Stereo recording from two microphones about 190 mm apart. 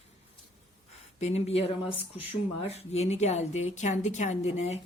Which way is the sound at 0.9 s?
35° left (ahead or behind).